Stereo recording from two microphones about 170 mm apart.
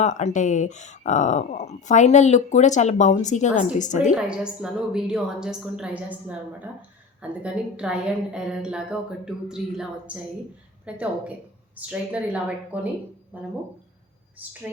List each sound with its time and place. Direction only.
0.0 s speech: 40° left (ahead or behind)
4.1 s a woman's voice: 5° right (ahead or behind)